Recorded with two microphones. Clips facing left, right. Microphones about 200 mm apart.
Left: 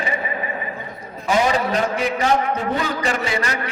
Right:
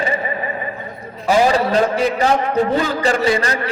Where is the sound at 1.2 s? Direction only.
35° right (ahead or behind).